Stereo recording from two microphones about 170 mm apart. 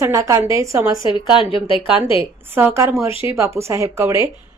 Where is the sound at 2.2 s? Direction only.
15° right (ahead or behind).